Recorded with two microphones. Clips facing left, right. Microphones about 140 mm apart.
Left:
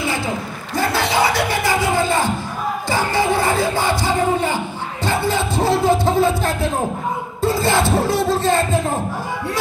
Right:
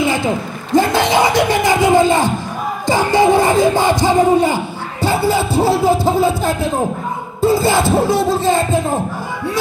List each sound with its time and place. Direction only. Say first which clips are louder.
0.0 s a sound: right 6 dB; 20° right (ahead or behind)
0.7 s speech: right 6 dB; 20° right (ahead or behind)
2.9 s crowd: right 7 dB; 15° right (ahead or behind)
5.0 s music: right 5 dB; 5° right (ahead or behind)
7.4 s speech: right 4 dB; centre (ahead or behind)